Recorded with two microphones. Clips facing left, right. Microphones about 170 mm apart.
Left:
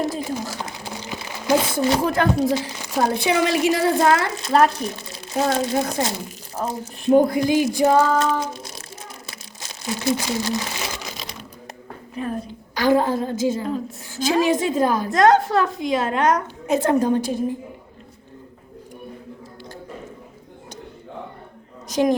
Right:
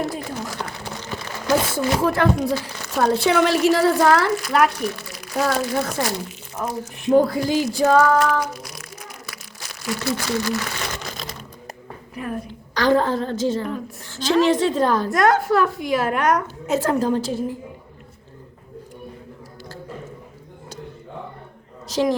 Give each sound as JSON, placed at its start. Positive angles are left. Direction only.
{"t": 0.0, "sound": "a sound", "side_deg": 20}
{"t": 0.9, "sound": "a sound", "side_deg": 10}
{"t": 2.0, "sound": "speech", "side_deg": 20}
{"t": 7.3, "sound": "speech", "side_deg": 15}
{"t": 9.2, "sound": "crumpling", "side_deg": 25}
{"t": 12.1, "sound": "speech", "side_deg": 25}
{"t": 12.7, "sound": "speech", "side_deg": 10}
{"t": 21.8, "sound": "a woman's voice", "side_deg": 15}